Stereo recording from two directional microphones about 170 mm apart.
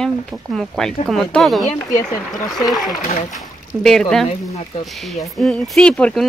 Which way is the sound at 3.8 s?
5° left (ahead or behind).